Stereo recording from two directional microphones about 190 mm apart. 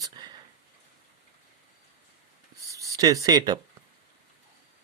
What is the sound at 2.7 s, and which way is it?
Speech, 15° right (ahead or behind).